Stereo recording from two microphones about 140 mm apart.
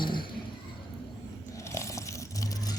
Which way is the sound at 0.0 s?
35° left (ahead or behind).